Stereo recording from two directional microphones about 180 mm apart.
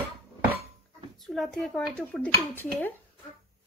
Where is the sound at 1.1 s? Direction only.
Centre (ahead or behind).